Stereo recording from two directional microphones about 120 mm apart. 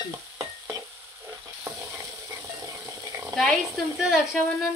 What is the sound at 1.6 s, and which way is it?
Stir, 25° right (ahead or behind).